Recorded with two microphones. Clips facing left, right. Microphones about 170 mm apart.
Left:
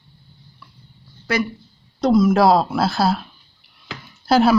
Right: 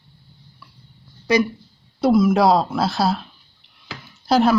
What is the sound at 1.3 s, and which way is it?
Speech, 15° right (ahead or behind).